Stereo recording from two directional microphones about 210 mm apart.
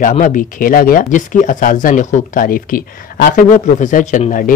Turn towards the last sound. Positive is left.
turn(degrees=40)  # may be behind; listen again after turning